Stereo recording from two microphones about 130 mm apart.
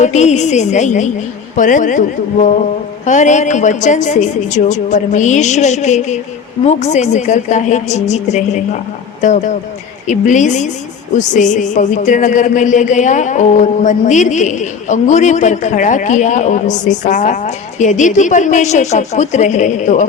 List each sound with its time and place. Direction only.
0.0 s a woman's voice: 60° left (ahead or behind)
1.5 s speech: 80° left
3.1 s music: 70° left (ahead or behind)
6.7 s a woman's voice: 60° left (ahead or behind)
10.1 s music: 70° left (ahead or behind)